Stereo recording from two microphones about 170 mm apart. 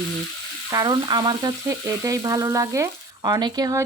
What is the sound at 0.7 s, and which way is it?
Frying, 20° right (ahead or behind).